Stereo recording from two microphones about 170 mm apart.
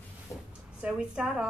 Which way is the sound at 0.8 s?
5° right (ahead or behind).